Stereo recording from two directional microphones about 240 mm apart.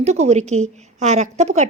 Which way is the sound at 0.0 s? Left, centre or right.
Right.